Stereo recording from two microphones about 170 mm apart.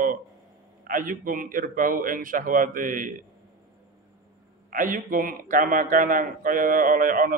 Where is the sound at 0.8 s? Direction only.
55° right (ahead or behind).